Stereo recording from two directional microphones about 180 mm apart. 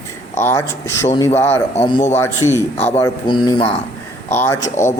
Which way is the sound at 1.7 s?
35° left (ahead or behind).